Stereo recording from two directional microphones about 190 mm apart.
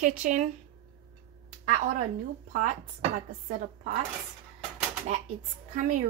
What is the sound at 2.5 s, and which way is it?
Speech, 45° right (ahead or behind).